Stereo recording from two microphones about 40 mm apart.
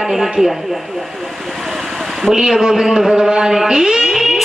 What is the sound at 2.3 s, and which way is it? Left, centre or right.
Speech, centre.